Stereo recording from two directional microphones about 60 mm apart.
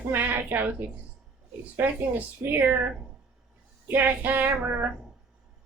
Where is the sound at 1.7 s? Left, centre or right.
Right.